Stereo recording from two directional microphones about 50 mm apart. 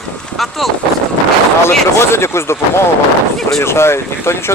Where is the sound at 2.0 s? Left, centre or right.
Left.